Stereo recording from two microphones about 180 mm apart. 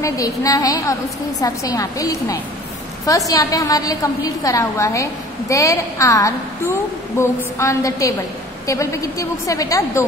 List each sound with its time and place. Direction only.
0.0 s a woman's voice: 20° left (ahead or behind)